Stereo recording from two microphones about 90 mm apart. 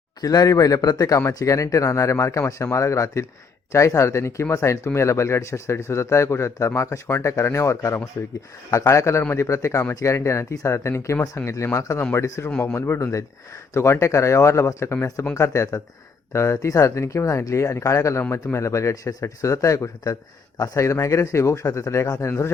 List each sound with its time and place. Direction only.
0.2 s a man's voice: 45° left (ahead or behind)
22.3 s speech: 25° left (ahead or behind)